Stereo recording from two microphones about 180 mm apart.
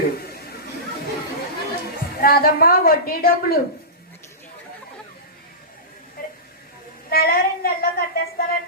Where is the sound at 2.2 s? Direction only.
55° left (ahead or behind).